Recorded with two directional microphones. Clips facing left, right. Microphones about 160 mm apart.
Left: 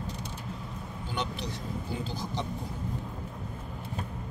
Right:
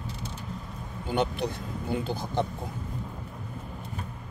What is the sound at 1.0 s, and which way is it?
Speech, 55° right (ahead or behind).